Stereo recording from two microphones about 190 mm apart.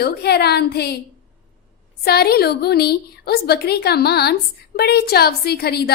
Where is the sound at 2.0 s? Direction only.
55° left (ahead or behind).